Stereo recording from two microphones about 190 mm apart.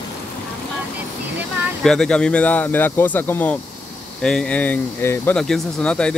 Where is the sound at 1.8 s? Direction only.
5° left (ahead or behind).